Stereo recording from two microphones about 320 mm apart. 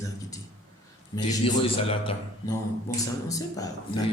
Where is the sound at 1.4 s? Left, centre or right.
Centre.